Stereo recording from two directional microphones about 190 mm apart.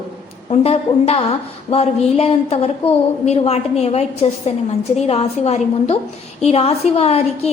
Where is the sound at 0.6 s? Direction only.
30° left (ahead or behind).